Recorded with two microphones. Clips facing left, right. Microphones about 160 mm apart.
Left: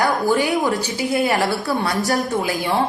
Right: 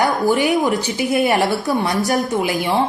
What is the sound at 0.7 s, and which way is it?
A woman's voice, 20° right (ahead or behind).